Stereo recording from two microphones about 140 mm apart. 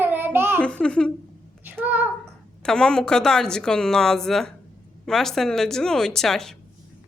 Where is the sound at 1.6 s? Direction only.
15° right (ahead or behind).